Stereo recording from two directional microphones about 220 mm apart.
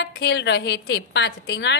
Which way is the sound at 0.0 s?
50° left (ahead or behind).